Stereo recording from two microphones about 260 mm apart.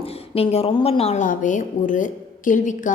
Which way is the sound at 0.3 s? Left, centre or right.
Left.